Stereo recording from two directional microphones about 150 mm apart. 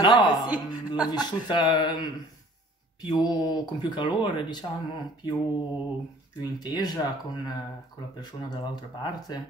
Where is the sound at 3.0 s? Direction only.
25° left (ahead or behind).